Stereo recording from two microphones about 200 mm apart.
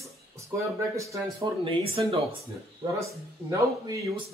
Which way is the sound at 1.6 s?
30° right (ahead or behind).